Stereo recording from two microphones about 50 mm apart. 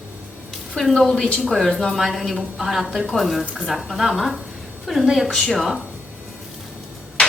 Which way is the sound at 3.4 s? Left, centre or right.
Right.